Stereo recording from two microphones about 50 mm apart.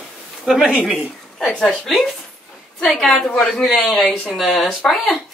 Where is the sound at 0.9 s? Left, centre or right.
Centre.